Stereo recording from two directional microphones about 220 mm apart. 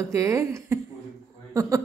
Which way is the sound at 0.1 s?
15° right (ahead or behind).